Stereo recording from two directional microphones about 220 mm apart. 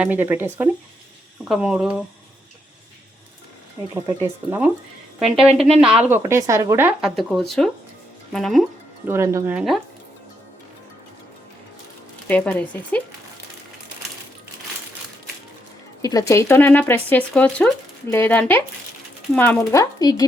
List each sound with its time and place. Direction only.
0.0 s speech: 10° right (ahead or behind)
3.9 s speech: 10° right (ahead or behind)
9.0 s speech: 10° right (ahead or behind)
12.3 s speech: 5° left (ahead or behind)
16.0 s speech: 15° left (ahead or behind)